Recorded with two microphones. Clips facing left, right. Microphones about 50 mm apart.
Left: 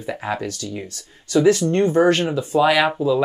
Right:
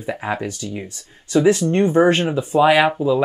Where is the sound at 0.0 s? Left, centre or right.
Centre.